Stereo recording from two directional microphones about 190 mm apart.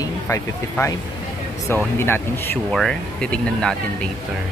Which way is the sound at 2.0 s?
10° left (ahead or behind).